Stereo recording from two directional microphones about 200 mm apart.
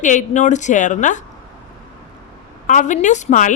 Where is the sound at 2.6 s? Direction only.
40° left (ahead or behind).